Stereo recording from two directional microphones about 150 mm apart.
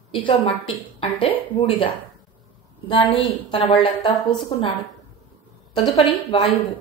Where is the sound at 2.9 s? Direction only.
35° left (ahead or behind).